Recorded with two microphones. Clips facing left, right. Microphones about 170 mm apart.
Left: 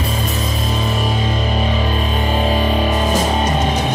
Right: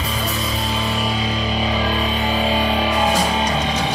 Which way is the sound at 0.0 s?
50° left (ahead or behind).